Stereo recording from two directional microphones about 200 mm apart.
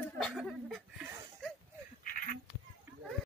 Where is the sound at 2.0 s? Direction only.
45° left (ahead or behind).